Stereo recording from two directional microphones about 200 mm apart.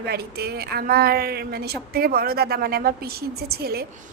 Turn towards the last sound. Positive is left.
turn(degrees=-50)  # may be behind; listen again after turning